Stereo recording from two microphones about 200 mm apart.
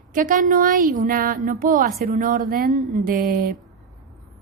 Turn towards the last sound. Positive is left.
turn(degrees=-45)  # may be behind; listen again after turning